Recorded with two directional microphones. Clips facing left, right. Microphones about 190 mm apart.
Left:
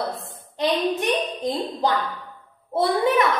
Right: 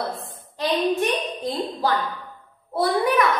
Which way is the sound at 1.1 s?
15° left (ahead or behind).